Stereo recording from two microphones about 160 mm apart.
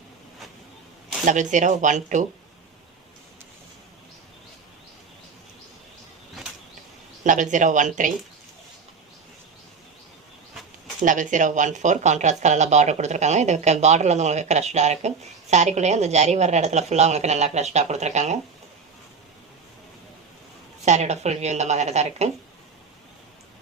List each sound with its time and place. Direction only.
1.2 s speech: 50° right (ahead or behind)
7.3 s speech: 50° right (ahead or behind)
10.5 s a sound: centre (ahead or behind)
11.0 s speech: 50° right (ahead or behind)
20.8 s speech: 45° right (ahead or behind)